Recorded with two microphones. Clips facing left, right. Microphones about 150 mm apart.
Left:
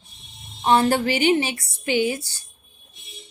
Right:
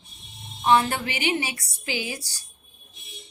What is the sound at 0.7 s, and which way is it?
A woman's voice, 35° left (ahead or behind).